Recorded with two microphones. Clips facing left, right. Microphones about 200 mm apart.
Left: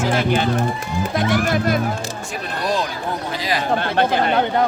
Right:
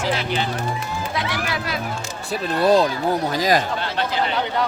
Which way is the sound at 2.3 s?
35° right (ahead or behind).